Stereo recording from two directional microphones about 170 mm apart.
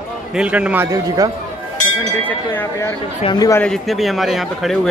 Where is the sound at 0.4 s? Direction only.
5° right (ahead or behind).